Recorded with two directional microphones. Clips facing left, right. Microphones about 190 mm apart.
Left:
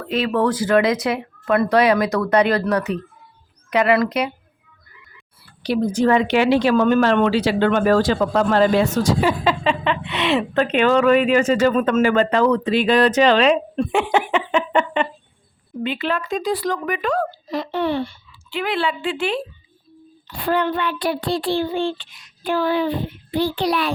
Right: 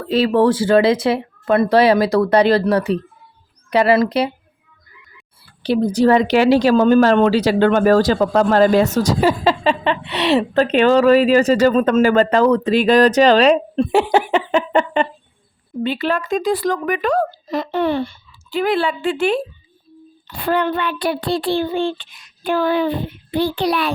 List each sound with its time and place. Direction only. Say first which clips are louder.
0.0 s speech: right 5 dB; 30° right (ahead or behind)
5.6 s speech: right 3 dB; 30° right (ahead or behind)
20.4 s child singing: right 2 dB; 60° right (ahead or behind)